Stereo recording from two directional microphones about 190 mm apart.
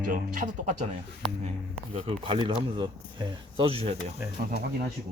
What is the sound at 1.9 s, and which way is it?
Speech, 30° right (ahead or behind).